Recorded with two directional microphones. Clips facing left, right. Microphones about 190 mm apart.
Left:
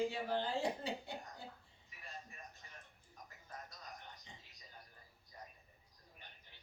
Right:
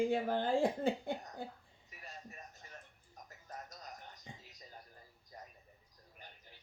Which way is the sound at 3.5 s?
40° right (ahead or behind).